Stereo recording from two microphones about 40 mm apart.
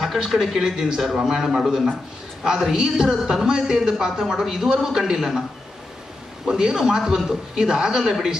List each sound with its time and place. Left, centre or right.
0.0 s a man's voice: centre
6.4 s a man's voice: centre